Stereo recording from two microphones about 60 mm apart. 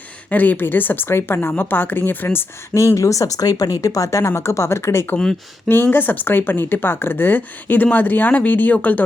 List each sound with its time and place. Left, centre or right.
0.3 s speech: left
2.7 s speech: left
5.6 s speech: left